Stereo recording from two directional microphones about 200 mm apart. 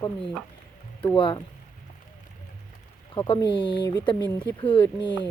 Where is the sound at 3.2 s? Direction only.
25° left (ahead or behind).